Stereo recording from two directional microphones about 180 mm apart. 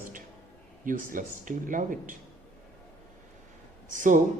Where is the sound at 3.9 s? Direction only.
45° right (ahead or behind).